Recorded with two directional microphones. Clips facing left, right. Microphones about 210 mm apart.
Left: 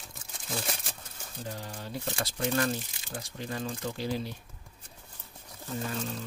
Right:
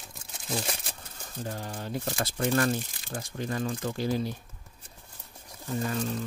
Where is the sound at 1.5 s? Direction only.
50° right (ahead or behind).